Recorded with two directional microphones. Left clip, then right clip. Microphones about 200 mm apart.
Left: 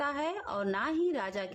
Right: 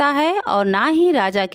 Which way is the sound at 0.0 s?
50° right (ahead or behind).